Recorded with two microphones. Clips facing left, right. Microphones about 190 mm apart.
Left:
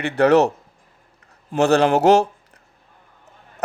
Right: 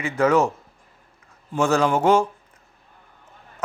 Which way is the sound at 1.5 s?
65° left (ahead or behind).